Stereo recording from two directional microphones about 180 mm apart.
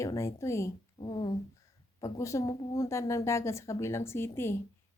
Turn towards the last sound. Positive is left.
turn(degrees=15)  # may be behind; listen again after turning